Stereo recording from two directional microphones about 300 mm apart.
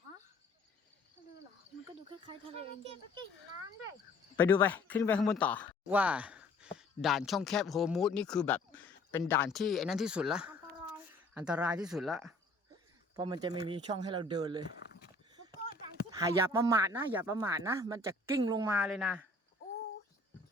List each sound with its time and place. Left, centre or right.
2.0 s speech: centre
4.4 s speech: centre
13.1 s speech: centre
14.8 s a sound: left
16.0 s speech: centre